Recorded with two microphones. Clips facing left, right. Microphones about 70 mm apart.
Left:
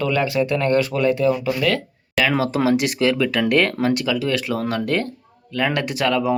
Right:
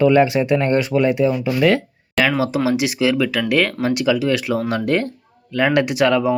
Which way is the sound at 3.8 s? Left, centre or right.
Centre.